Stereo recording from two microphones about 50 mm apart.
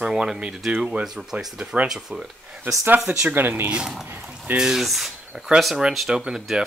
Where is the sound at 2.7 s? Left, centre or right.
Right.